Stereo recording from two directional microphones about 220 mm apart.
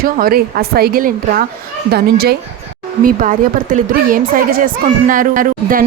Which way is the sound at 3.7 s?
40° right (ahead or behind).